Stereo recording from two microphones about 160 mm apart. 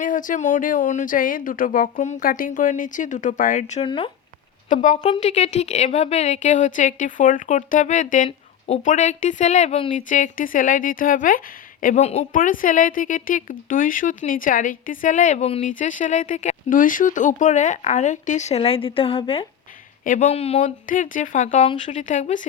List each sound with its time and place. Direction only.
0.0 s speech: 55° left (ahead or behind)
3.8 s speech: 35° left (ahead or behind)
4.7 s a woman's voice: 50° left (ahead or behind)
9.9 s speech: 55° left (ahead or behind)
11.9 s speech: 40° left (ahead or behind)
12.3 s speech: 55° left (ahead or behind); by 15.6 s 40° left (ahead or behind)
15.6 s a woman's voice: 55° left (ahead or behind)
20.8 s a woman's voice: 55° left (ahead or behind)